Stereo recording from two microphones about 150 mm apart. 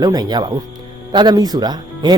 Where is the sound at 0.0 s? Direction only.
25° right (ahead or behind).